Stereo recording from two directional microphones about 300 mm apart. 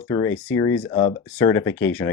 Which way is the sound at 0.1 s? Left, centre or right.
Centre.